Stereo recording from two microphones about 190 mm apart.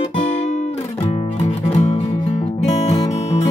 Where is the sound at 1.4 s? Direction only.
30° left (ahead or behind).